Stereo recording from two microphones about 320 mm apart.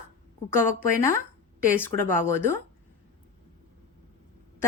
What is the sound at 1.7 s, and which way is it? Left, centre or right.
Speech, centre.